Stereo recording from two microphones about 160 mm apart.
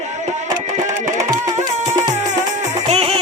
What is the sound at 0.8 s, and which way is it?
Music, 20° right (ahead or behind).